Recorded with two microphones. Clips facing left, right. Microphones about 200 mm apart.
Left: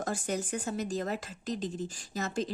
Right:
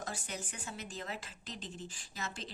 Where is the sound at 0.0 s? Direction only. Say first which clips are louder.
Left 10 dB; 45° left (ahead or behind).